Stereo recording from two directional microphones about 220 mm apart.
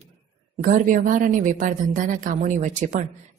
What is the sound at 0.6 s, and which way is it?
Speech, 35° right (ahead or behind).